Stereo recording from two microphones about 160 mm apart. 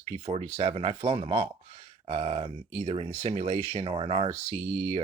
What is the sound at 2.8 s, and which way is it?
Speech, 40° right (ahead or behind).